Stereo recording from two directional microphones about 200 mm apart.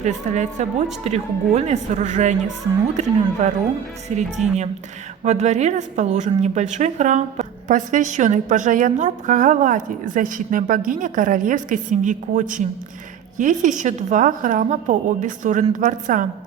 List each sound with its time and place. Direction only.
0.0 s speech: 35° right (ahead or behind)